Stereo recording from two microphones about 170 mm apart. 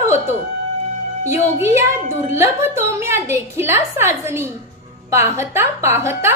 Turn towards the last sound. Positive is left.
turn(degrees=-15)  # may be behind; listen again after turning